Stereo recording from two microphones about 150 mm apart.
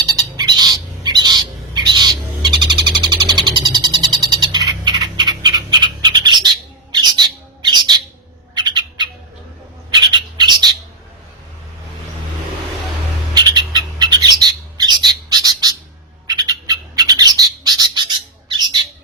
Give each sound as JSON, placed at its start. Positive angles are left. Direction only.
{"t": 0.0, "sound": "bird", "side_deg": -25}
{"t": 13.3, "sound": "bird", "side_deg": -30}
{"t": 18.5, "sound": "squawk", "side_deg": -30}